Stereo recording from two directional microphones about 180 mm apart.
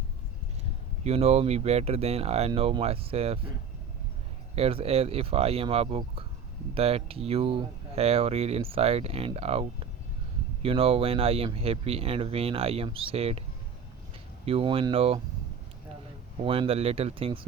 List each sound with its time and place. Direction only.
1.0 s speech: 35° right (ahead or behind)
4.5 s speech: 35° right (ahead or behind)
14.4 s speech: 30° right (ahead or behind)
16.4 s speech: 30° right (ahead or behind)